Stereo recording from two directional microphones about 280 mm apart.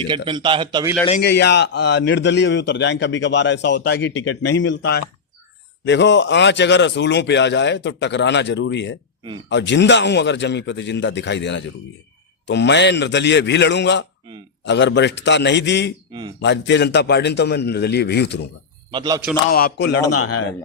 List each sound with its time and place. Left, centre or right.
0.3 s a man's voice: centre
1.2 s a man's voice: left
18.9 s a man's voice: centre
19.5 s a man's voice: left
20.0 s speech: left